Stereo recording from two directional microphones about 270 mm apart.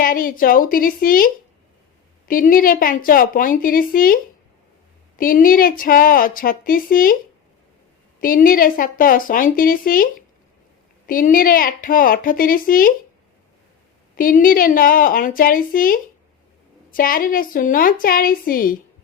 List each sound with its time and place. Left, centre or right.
0.0 s speech: left
8.2 s speech: left
14.2 s speech: left